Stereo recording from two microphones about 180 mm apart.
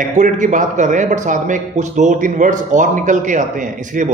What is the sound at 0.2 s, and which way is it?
A man's voice, 45° right (ahead or behind).